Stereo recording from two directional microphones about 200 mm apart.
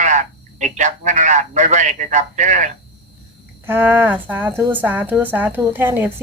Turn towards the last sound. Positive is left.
turn(degrees=-10)  # may be behind; listen again after turning